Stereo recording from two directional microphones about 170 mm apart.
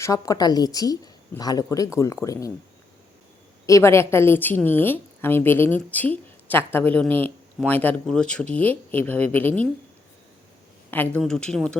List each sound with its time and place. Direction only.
0.0 s a woman's voice: 20° left (ahead or behind)
3.7 s a woman's voice: 15° left (ahead or behind)
10.9 s a woman's voice: 10° left (ahead or behind)